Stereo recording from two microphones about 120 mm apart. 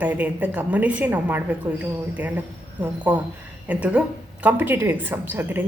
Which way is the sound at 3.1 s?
15° right (ahead or behind).